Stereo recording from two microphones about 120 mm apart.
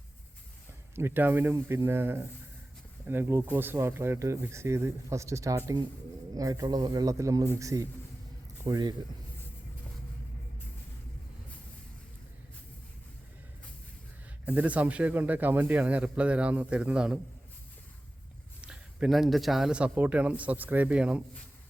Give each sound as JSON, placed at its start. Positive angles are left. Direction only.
{"t": 0.9, "sound": "speech", "side_deg": -20}
{"t": 14.4, "sound": "speech", "side_deg": -15}
{"t": 18.6, "sound": "speech", "side_deg": -10}